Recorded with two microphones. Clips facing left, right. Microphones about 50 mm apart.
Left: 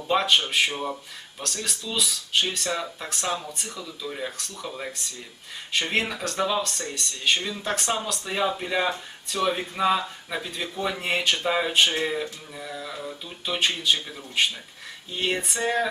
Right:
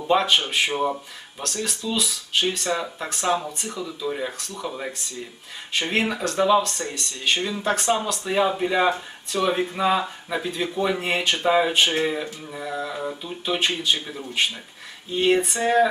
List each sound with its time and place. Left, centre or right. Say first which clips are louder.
0.1 s speech: right 2 dB; centre
0.7 s speech: right 6 dB; centre
1.5 s speech: right 4 dB; centre
12.5 s a sound: right 7 dB; right
13.2 s speech: right 1 dB; centre